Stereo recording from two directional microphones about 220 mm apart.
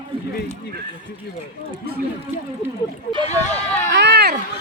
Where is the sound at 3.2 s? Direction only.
30° left (ahead or behind).